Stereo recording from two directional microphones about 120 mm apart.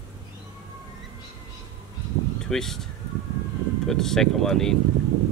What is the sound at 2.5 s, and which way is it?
Speech, 5° left (ahead or behind).